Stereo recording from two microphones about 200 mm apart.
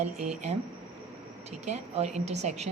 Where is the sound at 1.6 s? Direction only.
35° right (ahead or behind).